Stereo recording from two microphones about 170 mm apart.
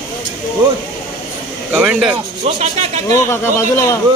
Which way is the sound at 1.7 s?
10° right (ahead or behind).